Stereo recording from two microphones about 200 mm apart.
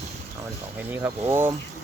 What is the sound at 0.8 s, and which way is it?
Speech, 10° right (ahead or behind).